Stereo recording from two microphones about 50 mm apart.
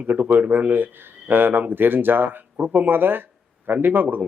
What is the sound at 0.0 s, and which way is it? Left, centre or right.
Speech, right.